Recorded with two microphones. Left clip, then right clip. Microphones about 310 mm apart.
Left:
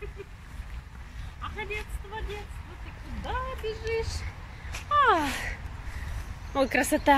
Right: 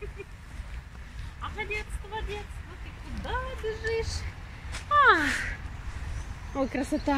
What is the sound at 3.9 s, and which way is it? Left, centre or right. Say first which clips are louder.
Vehicle: left 1 dB; centre.